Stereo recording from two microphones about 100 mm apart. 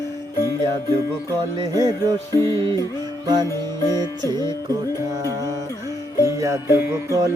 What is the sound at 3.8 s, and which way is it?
Music, 30° left (ahead or behind).